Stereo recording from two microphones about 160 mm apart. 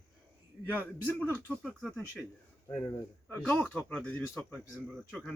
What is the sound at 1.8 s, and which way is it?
Speech, centre (ahead or behind).